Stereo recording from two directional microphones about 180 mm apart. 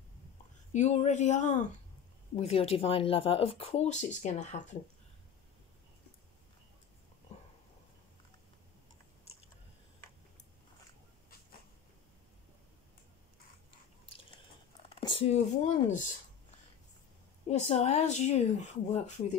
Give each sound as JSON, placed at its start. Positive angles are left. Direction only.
{"t": 0.7, "sound": "speech", "side_deg": 40}
{"t": 15.0, "sound": "a sound", "side_deg": 30}
{"t": 15.6, "sound": "speech", "side_deg": 45}
{"t": 17.5, "sound": "speech", "side_deg": 35}